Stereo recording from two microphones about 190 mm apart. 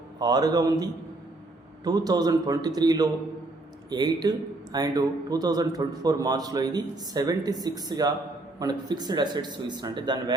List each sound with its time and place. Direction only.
0.2 s a man's voice: 20° right (ahead or behind)